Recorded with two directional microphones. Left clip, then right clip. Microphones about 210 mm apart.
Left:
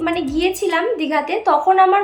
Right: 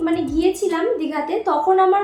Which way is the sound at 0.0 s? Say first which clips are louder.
Even; 35° left (ahead or behind).